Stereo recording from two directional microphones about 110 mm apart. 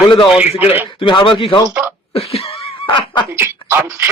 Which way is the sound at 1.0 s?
50° left (ahead or behind).